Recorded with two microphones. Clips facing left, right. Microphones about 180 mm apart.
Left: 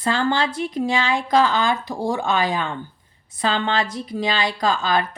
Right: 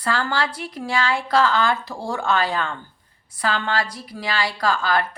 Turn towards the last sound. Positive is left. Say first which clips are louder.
# left 1 dB
turn(degrees=20)  # may be behind; listen again after turning